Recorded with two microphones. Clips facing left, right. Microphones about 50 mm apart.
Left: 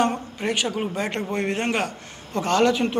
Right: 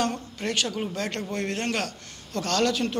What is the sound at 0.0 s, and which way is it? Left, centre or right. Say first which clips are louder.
A man's voice: left 5 dB; left.